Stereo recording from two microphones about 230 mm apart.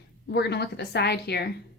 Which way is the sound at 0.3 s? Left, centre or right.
Left.